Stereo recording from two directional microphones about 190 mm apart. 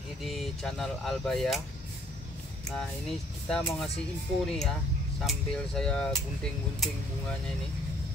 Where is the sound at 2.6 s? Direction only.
5° left (ahead or behind).